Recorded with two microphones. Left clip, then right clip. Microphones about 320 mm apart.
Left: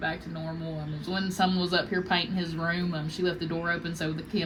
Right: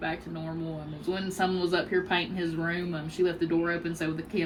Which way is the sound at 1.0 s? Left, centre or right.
Left.